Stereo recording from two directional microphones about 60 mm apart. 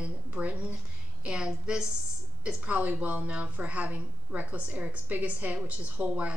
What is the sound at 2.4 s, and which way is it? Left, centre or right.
A woman's voice, right.